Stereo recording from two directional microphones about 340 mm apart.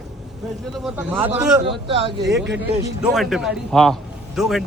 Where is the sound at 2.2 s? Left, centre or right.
Right.